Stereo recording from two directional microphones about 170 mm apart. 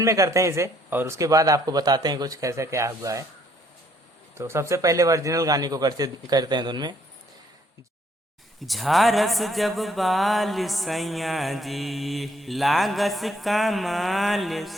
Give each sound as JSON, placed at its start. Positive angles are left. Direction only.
{"t": 0.0, "sound": "speech", "side_deg": -20}
{"t": 4.4, "sound": "speech", "side_deg": -15}
{"t": 8.6, "sound": "speech", "side_deg": 0}